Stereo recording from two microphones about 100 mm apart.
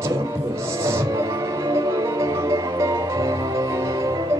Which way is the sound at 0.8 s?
30° right (ahead or behind).